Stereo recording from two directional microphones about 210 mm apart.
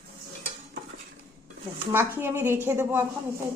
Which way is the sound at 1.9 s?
10° right (ahead or behind).